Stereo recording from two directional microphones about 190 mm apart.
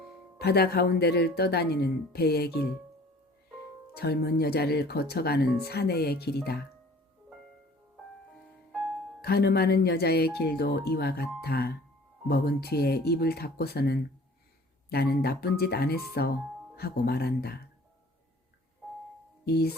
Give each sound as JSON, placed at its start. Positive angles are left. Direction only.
{"t": 0.3, "sound": "speech", "side_deg": 55}
{"t": 3.9, "sound": "speech", "side_deg": 55}
{"t": 9.2, "sound": "speech", "side_deg": 55}
{"t": 19.5, "sound": "speech", "side_deg": 55}